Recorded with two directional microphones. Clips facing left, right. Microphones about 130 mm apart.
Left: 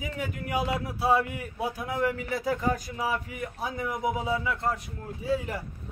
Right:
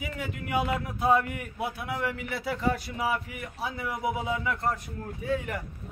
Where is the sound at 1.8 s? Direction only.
40° left (ahead or behind).